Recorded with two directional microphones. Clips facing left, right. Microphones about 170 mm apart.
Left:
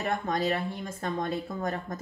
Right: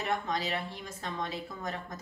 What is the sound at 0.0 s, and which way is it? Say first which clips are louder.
A woman's voice: left 4 dB; 50° left (ahead or behind).